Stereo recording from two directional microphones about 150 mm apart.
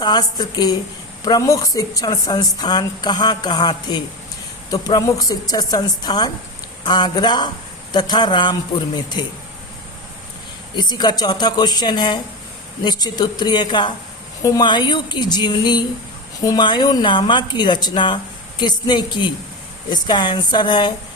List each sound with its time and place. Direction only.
0.0 s speech: 30° left (ahead or behind)
10.8 s speech: 30° left (ahead or behind)